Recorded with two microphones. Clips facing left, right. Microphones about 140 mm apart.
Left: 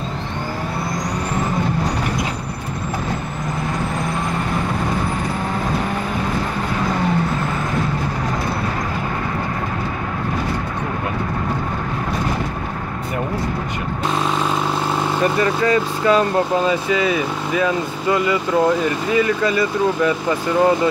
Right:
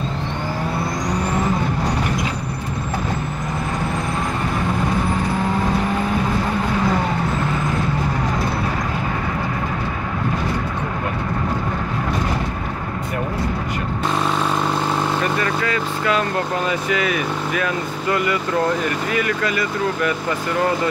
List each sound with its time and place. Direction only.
15.4 s speech: 25° left (ahead or behind)